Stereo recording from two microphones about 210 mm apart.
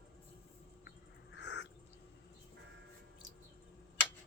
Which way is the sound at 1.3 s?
55° left (ahead or behind).